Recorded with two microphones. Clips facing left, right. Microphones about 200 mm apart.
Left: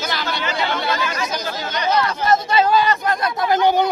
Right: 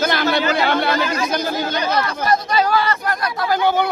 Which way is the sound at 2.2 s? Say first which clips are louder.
Left 1 dB; 25° left (ahead or behind).